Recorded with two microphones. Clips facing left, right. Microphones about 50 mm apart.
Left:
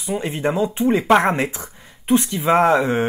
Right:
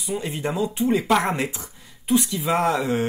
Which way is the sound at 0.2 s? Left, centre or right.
Left.